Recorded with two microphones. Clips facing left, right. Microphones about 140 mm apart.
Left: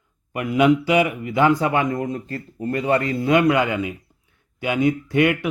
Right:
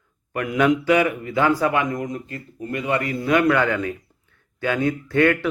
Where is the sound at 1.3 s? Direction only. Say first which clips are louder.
Left 2 dB; 25° left (ahead or behind).